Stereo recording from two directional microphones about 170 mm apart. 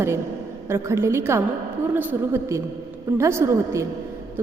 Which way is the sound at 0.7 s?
15° right (ahead or behind).